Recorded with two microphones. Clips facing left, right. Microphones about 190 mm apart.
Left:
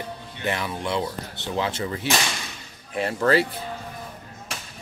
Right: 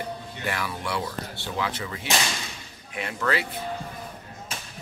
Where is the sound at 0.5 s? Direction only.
20° left (ahead or behind).